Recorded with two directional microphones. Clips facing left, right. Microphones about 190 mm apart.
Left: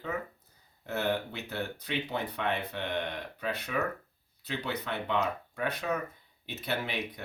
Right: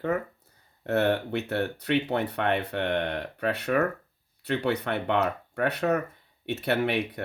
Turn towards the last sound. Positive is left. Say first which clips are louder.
# right 8 dB
turn(degrees=-70)  # may be behind; listen again after turning